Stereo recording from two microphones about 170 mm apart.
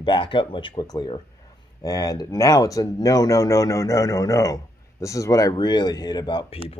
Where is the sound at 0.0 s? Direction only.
30° left (ahead or behind).